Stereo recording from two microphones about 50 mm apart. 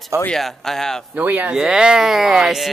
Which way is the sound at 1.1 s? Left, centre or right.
Right.